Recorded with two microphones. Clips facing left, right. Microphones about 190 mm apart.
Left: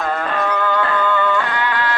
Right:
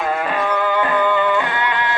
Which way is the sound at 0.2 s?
10° right (ahead or behind).